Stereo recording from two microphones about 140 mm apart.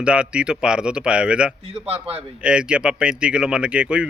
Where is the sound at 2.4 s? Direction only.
5° right (ahead or behind).